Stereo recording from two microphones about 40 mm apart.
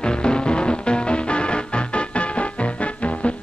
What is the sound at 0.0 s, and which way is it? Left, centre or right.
Music, left.